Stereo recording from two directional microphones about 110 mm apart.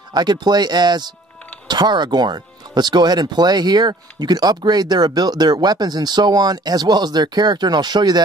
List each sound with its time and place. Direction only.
0.1 s speech: 40° right (ahead or behind)